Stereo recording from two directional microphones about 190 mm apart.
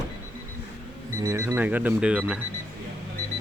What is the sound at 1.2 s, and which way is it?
A man's voice, 15° right (ahead or behind).